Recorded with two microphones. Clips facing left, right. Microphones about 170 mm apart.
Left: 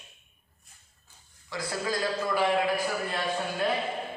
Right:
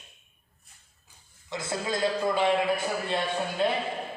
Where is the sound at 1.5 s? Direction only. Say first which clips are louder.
Right 1 dB; 25° right (ahead or behind).